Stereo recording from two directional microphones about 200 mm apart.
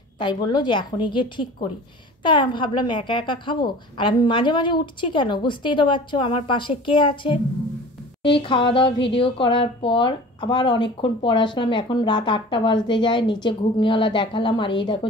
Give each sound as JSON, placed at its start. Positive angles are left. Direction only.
{"t": 0.2, "sound": "a woman's voice", "side_deg": 20}